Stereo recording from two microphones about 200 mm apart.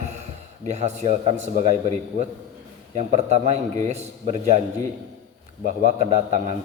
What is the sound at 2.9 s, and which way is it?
A man's voice, 35° right (ahead or behind).